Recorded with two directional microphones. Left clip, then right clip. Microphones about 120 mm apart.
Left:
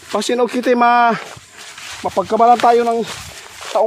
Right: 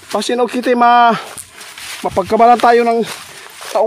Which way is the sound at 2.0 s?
45° right (ahead or behind).